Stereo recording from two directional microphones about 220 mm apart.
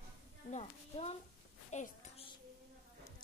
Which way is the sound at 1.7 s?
25° left (ahead or behind).